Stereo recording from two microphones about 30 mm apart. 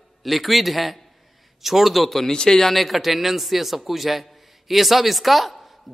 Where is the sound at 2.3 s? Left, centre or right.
Left.